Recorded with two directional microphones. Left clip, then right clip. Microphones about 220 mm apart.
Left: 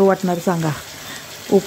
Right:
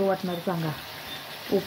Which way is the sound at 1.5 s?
40° left (ahead or behind).